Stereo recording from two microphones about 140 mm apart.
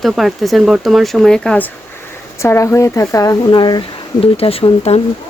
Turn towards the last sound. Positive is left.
turn(degrees=45)  # may be behind; listen again after turning